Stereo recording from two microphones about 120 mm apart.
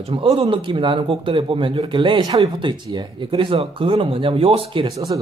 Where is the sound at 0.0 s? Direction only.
50° right (ahead or behind).